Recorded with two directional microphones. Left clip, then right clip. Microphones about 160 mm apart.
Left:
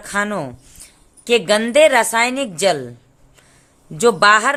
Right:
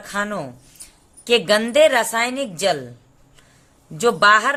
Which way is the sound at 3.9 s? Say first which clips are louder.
Left 2 dB; 20° left (ahead or behind).